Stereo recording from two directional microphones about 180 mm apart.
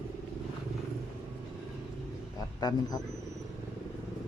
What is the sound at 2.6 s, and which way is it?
Speech, 20° left (ahead or behind).